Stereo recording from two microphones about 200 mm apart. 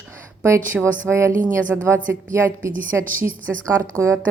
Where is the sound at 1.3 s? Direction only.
40° right (ahead or behind).